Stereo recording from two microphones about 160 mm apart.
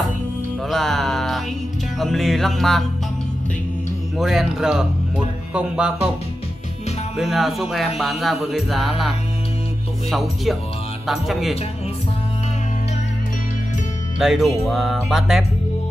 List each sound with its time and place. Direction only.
0.7 s music: centre (ahead or behind)
2.0 s a man's voice: centre (ahead or behind)
4.2 s a man's voice: centre (ahead or behind)
7.2 s a man's voice: centre (ahead or behind)
10.1 s a man's voice: centre (ahead or behind)
14.1 s a man's voice: 5° right (ahead or behind)